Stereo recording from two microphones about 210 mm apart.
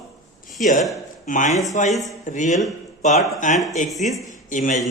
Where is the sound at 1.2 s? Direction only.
35° left (ahead or behind).